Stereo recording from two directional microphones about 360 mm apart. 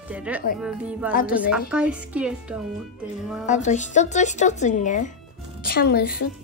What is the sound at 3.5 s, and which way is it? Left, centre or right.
Speech, centre.